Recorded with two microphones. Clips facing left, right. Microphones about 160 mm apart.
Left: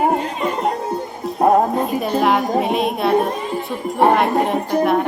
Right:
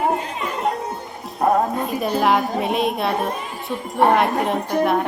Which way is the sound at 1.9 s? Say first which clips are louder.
Left 2 dB; centre (ahead or behind).